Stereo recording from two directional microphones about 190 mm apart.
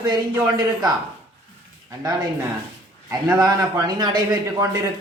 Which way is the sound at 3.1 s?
15° right (ahead or behind).